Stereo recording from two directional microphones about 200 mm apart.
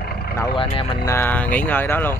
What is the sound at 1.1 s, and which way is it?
Speech, 10° left (ahead or behind).